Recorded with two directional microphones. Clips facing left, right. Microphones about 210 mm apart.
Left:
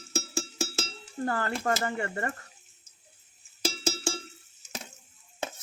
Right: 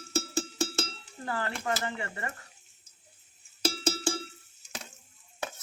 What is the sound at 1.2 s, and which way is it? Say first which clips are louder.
Speech: left 4 dB; 45° left (ahead or behind).